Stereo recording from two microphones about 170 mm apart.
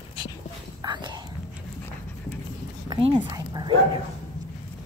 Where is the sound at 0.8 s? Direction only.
25° right (ahead or behind).